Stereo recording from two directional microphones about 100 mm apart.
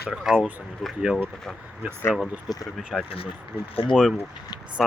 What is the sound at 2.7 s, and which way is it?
Speech, centre (ahead or behind).